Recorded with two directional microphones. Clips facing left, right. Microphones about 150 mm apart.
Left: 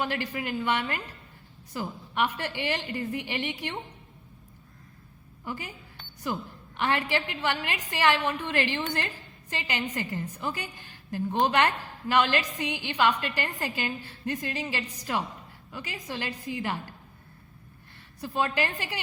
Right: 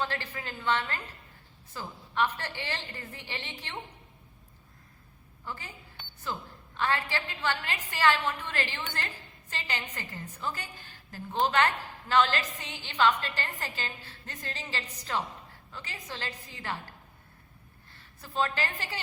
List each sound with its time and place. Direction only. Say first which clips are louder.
0.0 s a woman's voice: left 4 dB; 15° left (ahead or behind)
5.5 s a woman's voice: left 5 dB; 15° left (ahead or behind)
18.2 s a woman's voice: left 3 dB; 15° left (ahead or behind)